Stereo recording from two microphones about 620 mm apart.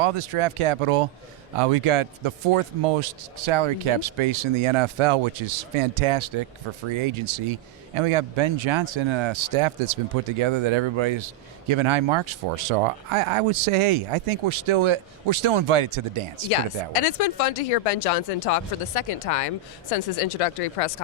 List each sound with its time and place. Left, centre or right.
0.0 s speech: right
16.5 s speech: left